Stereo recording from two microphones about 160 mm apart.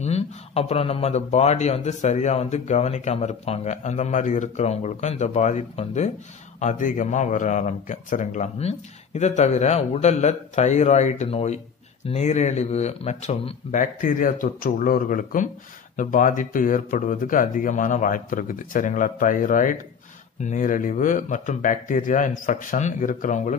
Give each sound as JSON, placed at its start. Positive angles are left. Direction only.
{"t": 0.0, "sound": "speech", "side_deg": 40}